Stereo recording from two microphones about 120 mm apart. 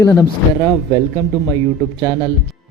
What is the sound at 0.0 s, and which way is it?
Speech, 25° left (ahead or behind).